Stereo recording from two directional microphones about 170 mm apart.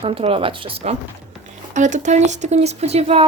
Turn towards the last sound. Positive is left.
turn(degrees=-35)  # may be behind; listen again after turning